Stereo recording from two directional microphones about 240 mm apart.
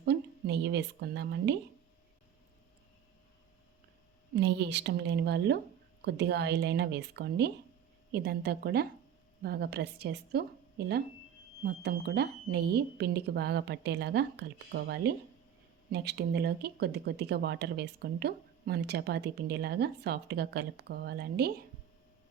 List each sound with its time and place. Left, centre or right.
0.0 s a woman's voice: right
4.4 s a woman's voice: right
11.6 s speech: right